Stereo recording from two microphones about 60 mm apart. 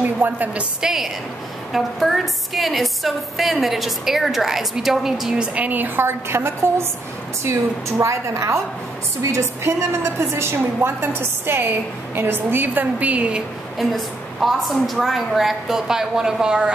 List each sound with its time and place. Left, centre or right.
0.0 s a woman's voice: right
0.7 s a woman's voice: centre; by 6.7 s right
8.0 s a woman's voice: right
13.7 s a woman's voice: centre